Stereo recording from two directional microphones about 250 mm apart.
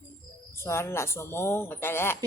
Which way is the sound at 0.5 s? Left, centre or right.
Centre.